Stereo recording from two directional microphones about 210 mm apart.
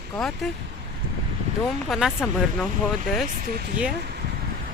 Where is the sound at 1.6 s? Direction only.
Centre (ahead or behind).